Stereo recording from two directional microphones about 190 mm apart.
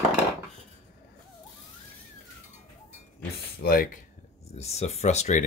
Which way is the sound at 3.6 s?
50° left (ahead or behind).